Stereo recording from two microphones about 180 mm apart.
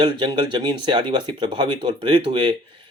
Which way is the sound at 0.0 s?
25° right (ahead or behind).